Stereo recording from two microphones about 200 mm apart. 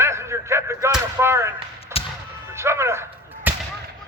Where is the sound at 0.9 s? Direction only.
15° right (ahead or behind).